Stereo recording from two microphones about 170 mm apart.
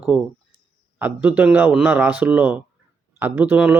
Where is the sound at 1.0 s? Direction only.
10° right (ahead or behind).